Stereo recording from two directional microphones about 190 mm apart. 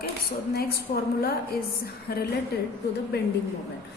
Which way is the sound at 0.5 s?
55° left (ahead or behind).